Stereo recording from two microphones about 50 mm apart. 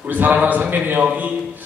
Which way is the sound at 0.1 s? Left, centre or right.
Right.